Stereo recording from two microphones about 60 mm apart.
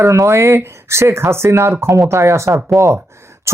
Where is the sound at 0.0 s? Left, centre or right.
Right.